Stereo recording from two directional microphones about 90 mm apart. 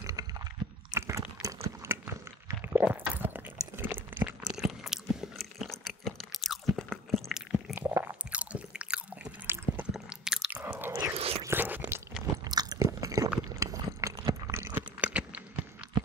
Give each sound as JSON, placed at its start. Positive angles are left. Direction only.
{"t": 0.0, "sound": "a sound", "side_deg": -40}
{"t": 4.6, "sound": "chewing", "side_deg": -5}
{"t": 7.7, "sound": "biting", "side_deg": -25}
{"t": 9.8, "sound": "squish", "side_deg": -5}
{"t": 10.5, "sound": "chewing", "side_deg": -25}
{"t": 11.1, "sound": "biting", "side_deg": -90}
{"t": 11.4, "sound": "crunch", "side_deg": -20}
{"t": 12.4, "sound": "biting", "side_deg": -45}
{"t": 12.8, "sound": "biting", "side_deg": -35}
{"t": 13.6, "sound": "a sound", "side_deg": -35}
{"t": 14.5, "sound": "chewing", "side_deg": -30}
{"t": 15.0, "sound": "a sound", "side_deg": -15}